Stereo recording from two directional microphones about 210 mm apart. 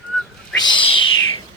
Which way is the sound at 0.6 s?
20° left (ahead or behind).